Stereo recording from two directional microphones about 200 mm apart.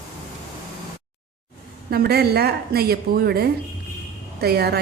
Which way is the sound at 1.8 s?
50° right (ahead or behind).